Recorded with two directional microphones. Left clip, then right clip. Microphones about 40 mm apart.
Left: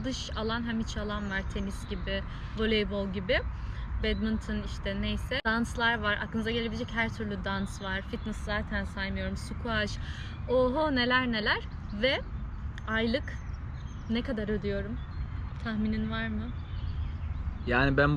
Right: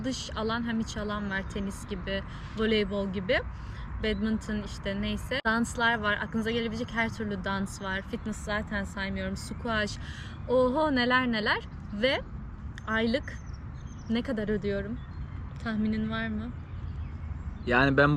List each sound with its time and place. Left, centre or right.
0.0 s speech: right
17.7 s speech: right